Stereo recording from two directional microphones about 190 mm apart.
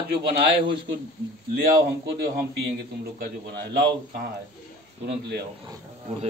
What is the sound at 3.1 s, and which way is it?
A man's voice, 60° right (ahead or behind).